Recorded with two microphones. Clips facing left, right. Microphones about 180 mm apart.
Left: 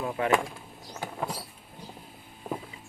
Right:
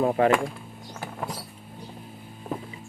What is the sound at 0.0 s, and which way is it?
Speech, 45° right (ahead or behind).